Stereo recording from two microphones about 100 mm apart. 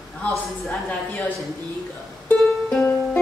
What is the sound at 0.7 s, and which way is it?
Speech, 15° left (ahead or behind).